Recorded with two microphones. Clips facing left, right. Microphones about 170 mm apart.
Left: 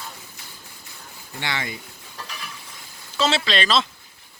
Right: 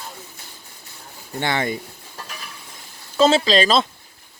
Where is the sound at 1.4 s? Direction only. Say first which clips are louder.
Right 7 dB; 50° right (ahead or behind).